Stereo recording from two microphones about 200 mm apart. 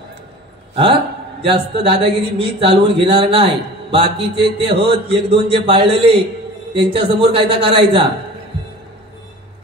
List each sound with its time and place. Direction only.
1.4 s a man's voice: 25° right (ahead or behind)